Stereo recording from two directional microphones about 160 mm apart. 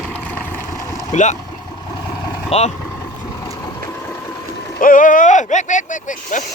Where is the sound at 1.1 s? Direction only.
50° left (ahead or behind).